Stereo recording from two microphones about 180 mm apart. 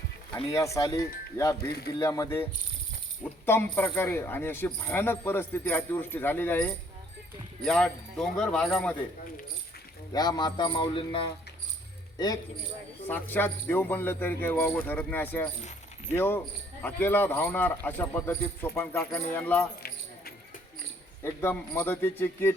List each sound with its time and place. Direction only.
0.3 s speech: 15° left (ahead or behind)
10.1 s a man's voice: 20° left (ahead or behind)
13.1 s speech: 10° left (ahead or behind)
21.4 s speech: 10° left (ahead or behind)